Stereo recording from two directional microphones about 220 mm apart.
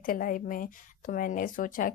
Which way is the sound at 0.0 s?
40° left (ahead or behind).